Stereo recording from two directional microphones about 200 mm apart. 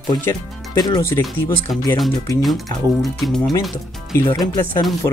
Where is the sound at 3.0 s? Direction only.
Centre (ahead or behind).